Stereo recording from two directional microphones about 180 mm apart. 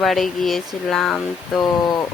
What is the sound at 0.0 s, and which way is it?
Speech, centre (ahead or behind).